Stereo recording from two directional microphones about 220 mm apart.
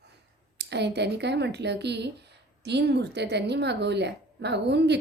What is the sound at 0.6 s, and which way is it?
A woman's voice, 50° right (ahead or behind).